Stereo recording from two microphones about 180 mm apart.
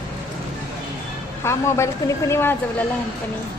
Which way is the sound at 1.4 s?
15° left (ahead or behind).